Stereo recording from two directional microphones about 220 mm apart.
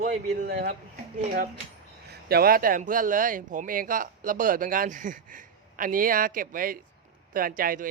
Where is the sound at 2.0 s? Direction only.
45° right (ahead or behind).